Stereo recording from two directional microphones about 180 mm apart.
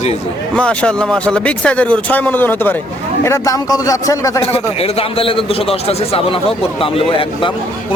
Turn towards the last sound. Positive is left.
turn(degrees=30)  # may be behind; listen again after turning